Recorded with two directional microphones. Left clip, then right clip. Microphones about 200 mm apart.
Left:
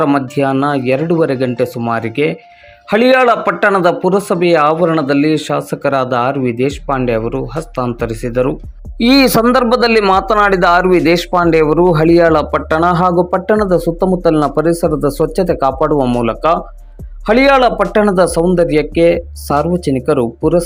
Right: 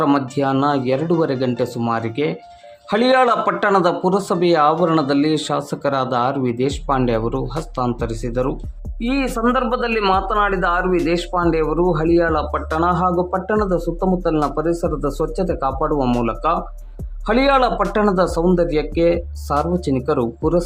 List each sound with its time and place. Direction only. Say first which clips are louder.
0.0 s a man's voice: left 4 dB; 15° left (ahead or behind)
7.9 s a man's voice: left 7 dB; 15° left (ahead or behind)
9.0 s a man's voice: left 11 dB; 30° left (ahead or behind)
16.0 s a man's voice: left 5 dB; 5° left (ahead or behind)
16.2 s a man's voice: left 6 dB; 20° left (ahead or behind)